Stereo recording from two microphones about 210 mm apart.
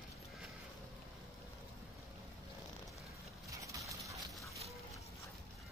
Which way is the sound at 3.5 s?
15° right (ahead or behind).